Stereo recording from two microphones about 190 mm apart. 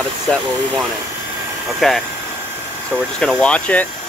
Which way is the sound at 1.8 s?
Centre (ahead or behind).